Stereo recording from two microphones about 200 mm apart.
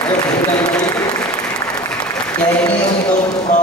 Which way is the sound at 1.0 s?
20° left (ahead or behind).